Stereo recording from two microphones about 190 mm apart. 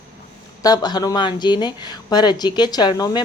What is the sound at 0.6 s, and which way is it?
A woman's voice, 20° left (ahead or behind).